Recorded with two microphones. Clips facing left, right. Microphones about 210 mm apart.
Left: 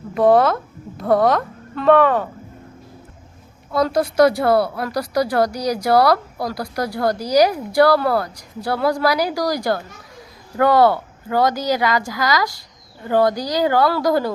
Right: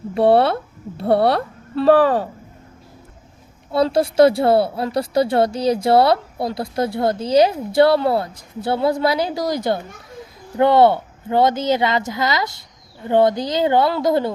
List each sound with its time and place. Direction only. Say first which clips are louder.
0.1 s speech: even; 30° right (ahead or behind)
3.7 s speech: right 1 dB; 30° right (ahead or behind)